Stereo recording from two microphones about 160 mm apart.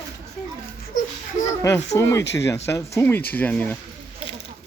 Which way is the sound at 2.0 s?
20° left (ahead or behind).